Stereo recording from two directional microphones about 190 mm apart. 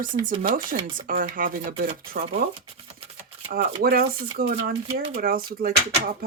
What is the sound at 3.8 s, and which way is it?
Speech, 50° right (ahead or behind).